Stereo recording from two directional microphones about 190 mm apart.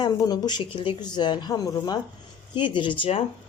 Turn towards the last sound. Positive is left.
turn(degrees=30)  # may be behind; listen again after turning